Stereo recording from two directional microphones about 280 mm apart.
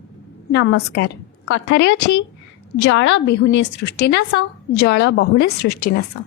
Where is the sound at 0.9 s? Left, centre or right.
Left.